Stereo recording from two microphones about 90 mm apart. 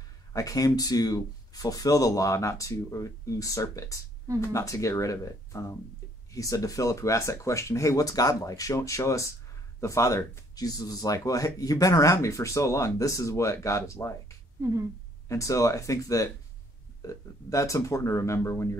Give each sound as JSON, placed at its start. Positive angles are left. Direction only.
{"t": 0.3, "sound": "speech", "side_deg": 40}
{"t": 15.2, "sound": "speech", "side_deg": 35}